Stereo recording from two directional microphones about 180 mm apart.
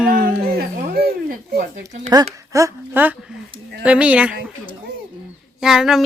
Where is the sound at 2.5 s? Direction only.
15° right (ahead or behind).